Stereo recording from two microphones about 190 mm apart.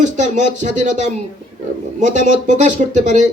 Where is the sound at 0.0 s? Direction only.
40° right (ahead or behind).